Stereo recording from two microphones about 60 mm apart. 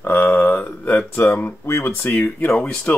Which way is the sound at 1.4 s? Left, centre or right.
Left.